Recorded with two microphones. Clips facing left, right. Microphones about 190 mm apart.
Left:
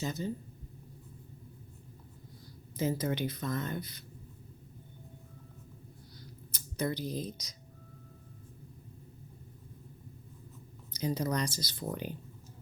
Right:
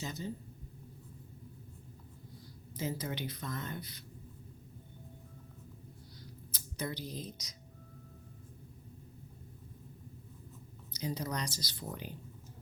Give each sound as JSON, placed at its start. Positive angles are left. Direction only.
{"t": 0.0, "sound": "speech", "side_deg": 50}
{"t": 2.7, "sound": "speech", "side_deg": 50}
{"t": 6.5, "sound": "a sound", "side_deg": 50}
{"t": 10.9, "sound": "speech", "side_deg": 50}